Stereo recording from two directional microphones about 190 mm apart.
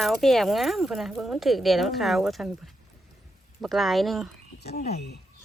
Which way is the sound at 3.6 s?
Centre (ahead or behind).